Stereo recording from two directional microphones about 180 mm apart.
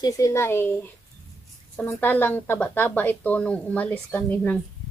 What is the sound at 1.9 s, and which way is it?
Speech, 10° left (ahead or behind).